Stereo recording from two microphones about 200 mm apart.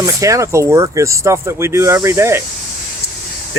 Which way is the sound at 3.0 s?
50° left (ahead or behind).